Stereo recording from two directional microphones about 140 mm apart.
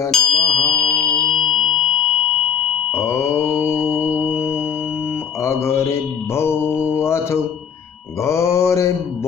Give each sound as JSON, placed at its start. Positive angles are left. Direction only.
{"t": 0.1, "sound": "mantra", "side_deg": 0}
{"t": 1.0, "sound": "chirp tone", "side_deg": 0}
{"t": 3.3, "sound": "mantra", "side_deg": 20}
{"t": 4.2, "sound": "music", "side_deg": 15}
{"t": 5.4, "sound": "mantra", "side_deg": 20}